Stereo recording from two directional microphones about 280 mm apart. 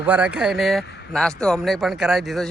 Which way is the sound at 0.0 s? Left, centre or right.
Centre.